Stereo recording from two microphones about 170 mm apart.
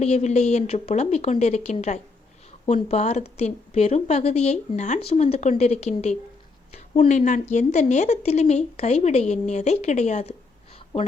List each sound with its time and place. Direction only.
0.0 s a woman's voice: 40° left (ahead or behind)